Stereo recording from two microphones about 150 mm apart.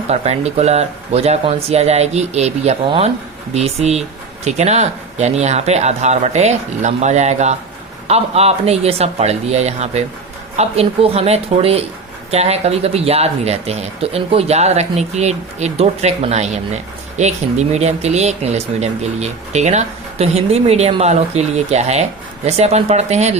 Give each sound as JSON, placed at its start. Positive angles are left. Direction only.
{"t": 0.1, "sound": "speech", "side_deg": -45}